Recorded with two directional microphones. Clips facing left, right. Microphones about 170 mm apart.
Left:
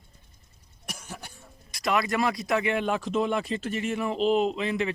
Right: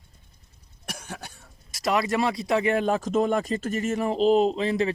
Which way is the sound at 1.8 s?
30° right (ahead or behind).